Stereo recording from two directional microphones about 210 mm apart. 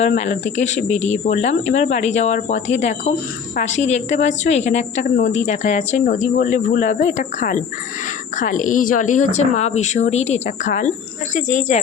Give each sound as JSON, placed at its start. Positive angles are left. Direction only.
{"t": 0.0, "sound": "speech", "side_deg": 35}